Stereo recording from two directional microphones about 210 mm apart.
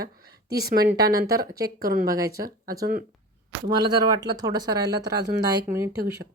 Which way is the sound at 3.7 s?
20° right (ahead or behind).